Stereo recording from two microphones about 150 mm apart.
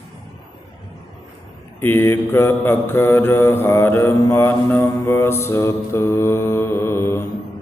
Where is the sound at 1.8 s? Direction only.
15° left (ahead or behind).